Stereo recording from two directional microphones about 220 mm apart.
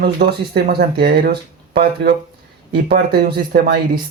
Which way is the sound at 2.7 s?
45° right (ahead or behind).